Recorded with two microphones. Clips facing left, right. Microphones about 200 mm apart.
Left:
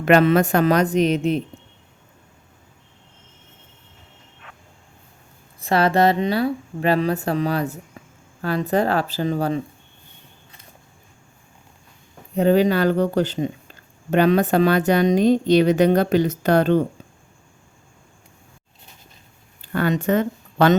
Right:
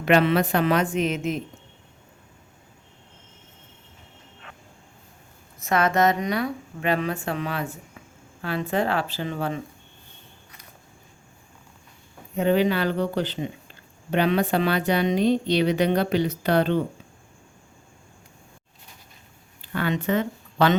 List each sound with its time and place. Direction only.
0.0 s a woman's voice: 45° left (ahead or behind)
5.5 s a woman's voice: 30° left (ahead or behind)
12.4 s a woman's voice: 40° left (ahead or behind)
19.6 s speech: 45° left (ahead or behind)